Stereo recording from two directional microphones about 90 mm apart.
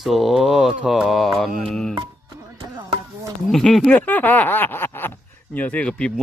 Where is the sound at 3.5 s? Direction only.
5° left (ahead or behind).